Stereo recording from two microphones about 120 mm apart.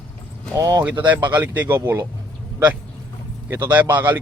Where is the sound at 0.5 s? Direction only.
30° right (ahead or behind).